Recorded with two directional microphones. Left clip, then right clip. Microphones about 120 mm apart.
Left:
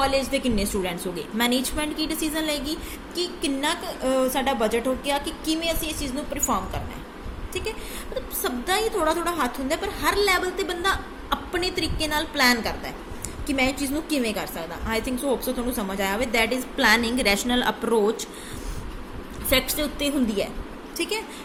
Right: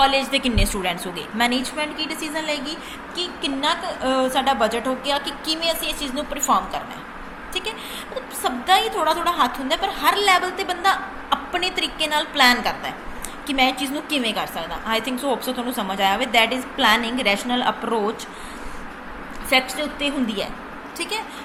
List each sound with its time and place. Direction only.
0.0 s a woman's voice: 25° left (ahead or behind); by 2.6 s 45° left (ahead or behind)
4.0 s a woman's voice: 40° left (ahead or behind)
8.4 s a woman's voice: 35° left (ahead or behind)
16.7 s a woman's voice: 45° left (ahead or behind)
19.5 s a woman's voice: 55° left (ahead or behind)